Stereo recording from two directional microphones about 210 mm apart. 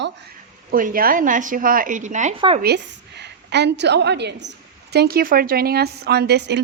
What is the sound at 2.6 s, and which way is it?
A woman's voice, 50° right (ahead or behind).